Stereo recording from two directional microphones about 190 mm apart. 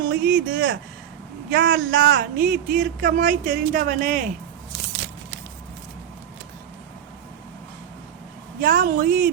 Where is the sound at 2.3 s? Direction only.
40° right (ahead or behind).